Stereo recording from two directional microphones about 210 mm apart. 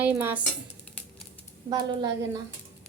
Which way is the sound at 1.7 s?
20° right (ahead or behind).